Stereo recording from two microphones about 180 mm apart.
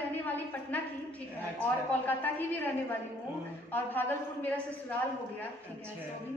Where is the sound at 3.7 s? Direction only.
10° left (ahead or behind).